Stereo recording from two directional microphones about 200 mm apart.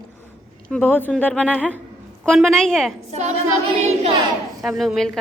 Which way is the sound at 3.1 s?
35° right (ahead or behind).